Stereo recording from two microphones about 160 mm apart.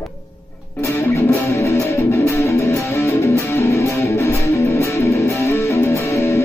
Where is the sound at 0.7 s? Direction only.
15° left (ahead or behind).